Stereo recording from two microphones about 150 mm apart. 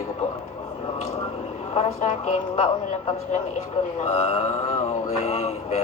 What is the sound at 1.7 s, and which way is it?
Speech, 55° left (ahead or behind).